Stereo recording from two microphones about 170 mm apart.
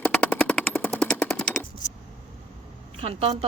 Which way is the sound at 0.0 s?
10° left (ahead or behind).